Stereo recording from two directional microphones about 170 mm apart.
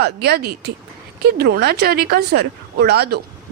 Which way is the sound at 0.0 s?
70° right (ahead or behind).